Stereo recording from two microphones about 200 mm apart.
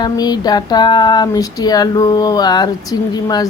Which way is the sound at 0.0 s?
20° left (ahead or behind).